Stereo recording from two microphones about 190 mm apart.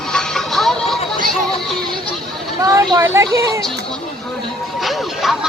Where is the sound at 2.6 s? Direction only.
20° right (ahead or behind).